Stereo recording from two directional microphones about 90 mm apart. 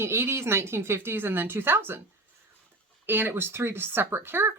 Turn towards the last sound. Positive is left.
turn(degrees=-25)  # may be behind; listen again after turning